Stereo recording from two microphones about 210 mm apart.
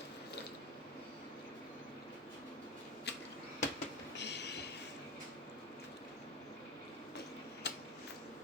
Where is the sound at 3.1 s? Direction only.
50° left (ahead or behind).